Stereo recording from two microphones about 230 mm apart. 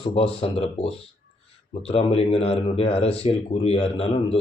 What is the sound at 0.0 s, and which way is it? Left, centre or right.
Speech, left.